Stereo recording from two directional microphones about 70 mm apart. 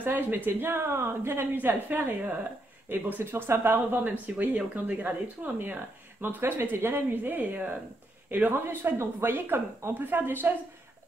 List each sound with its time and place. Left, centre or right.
0.0 s speech: right
8.5 s speech: right